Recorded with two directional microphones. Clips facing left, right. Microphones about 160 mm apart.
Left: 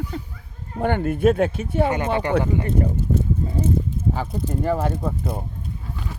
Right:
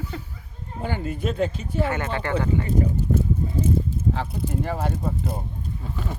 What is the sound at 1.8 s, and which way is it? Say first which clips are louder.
Speech: left 5 dB; 20° left (ahead or behind).